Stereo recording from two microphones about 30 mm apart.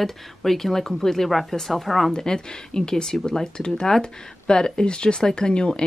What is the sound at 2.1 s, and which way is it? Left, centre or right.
Speech, left.